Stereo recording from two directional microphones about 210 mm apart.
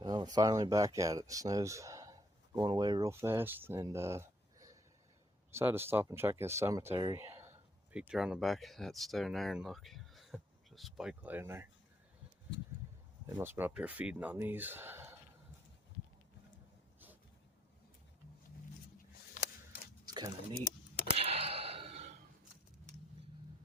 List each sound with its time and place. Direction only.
0.0 s speech: 20° right (ahead or behind)
13.2 s speech: 10° right (ahead or behind)
20.1 s speech: 20° right (ahead or behind)
21.1 s a sound: 30° right (ahead or behind)